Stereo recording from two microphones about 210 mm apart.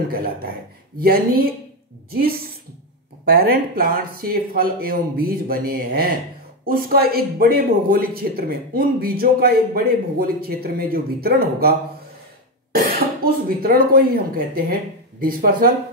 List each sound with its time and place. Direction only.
0.1 s speech: 45° right (ahead or behind)
3.3 s speech: 45° right (ahead or behind)
12.7 s speech: 45° right (ahead or behind)